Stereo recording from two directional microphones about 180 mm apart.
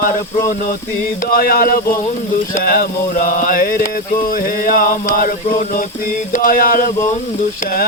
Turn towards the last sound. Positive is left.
turn(degrees=50)  # may be behind; listen again after turning